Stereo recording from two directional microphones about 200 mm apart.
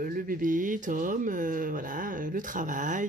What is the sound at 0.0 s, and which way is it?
Speech, 45° right (ahead or behind).